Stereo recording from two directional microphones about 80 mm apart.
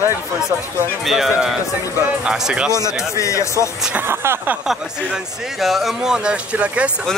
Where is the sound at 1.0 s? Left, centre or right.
Centre.